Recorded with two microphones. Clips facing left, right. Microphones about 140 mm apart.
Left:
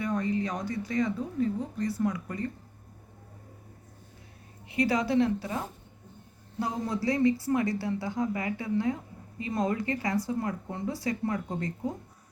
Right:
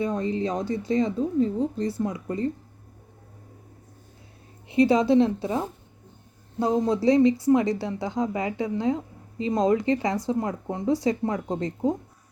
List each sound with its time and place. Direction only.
0.0 s speech: 25° right (ahead or behind)
4.7 s speech: 25° right (ahead or behind)